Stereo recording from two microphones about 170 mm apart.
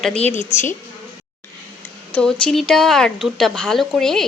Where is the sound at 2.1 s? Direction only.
5° left (ahead or behind).